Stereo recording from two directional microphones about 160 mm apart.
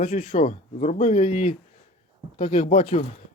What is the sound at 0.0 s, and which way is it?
Speech, 50° left (ahead or behind).